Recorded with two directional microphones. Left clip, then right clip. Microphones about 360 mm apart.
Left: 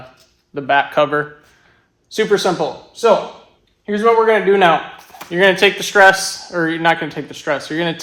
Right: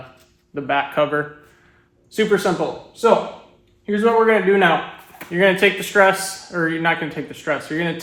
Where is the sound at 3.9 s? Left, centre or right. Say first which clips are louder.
Left 3 dB; left.